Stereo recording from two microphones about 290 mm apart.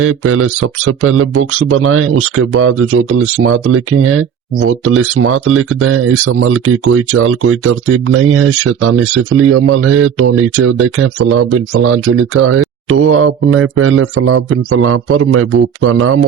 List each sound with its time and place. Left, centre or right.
0.0 s speech: right